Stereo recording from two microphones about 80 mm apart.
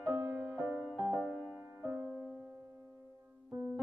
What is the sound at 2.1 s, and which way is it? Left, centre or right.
Music, centre.